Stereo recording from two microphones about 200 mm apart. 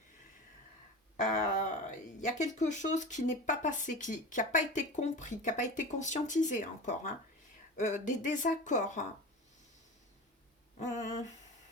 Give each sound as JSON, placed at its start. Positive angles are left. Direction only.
{"t": 1.1, "sound": "a sound", "side_deg": 40}
{"t": 2.2, "sound": "speech", "side_deg": 35}
{"t": 10.8, "sound": "speech", "side_deg": 35}